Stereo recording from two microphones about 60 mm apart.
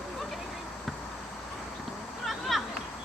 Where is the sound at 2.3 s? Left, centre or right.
Centre.